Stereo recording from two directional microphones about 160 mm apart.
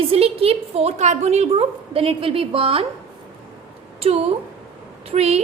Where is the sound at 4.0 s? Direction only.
40° right (ahead or behind).